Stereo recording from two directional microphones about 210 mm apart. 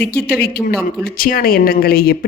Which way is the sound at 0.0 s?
50° left (ahead or behind).